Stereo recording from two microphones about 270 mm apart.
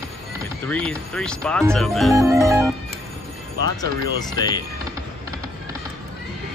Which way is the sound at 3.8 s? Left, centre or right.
Right.